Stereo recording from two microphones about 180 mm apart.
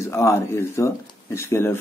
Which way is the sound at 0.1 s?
15° left (ahead or behind).